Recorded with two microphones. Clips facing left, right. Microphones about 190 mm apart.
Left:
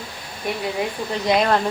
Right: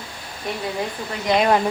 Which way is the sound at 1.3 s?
5° right (ahead or behind).